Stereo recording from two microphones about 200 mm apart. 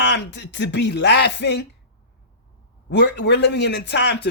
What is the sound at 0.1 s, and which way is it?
Speech, 60° left (ahead or behind).